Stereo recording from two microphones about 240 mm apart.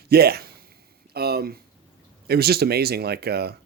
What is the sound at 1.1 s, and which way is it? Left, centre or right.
Speech, right.